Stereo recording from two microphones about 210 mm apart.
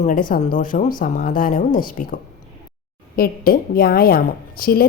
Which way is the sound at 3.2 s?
45° left (ahead or behind).